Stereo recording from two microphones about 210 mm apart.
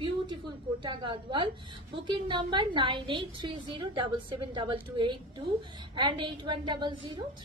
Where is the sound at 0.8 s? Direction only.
20° right (ahead or behind).